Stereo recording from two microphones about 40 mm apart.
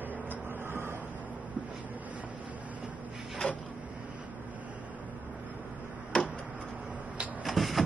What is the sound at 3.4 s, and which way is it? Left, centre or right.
Printer, left.